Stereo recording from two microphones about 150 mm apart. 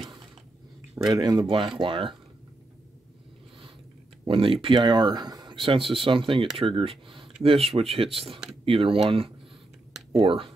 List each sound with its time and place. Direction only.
0.9 s speech: 25° right (ahead or behind)
4.3 s speech: 35° right (ahead or behind)
10.1 s speech: 35° right (ahead or behind)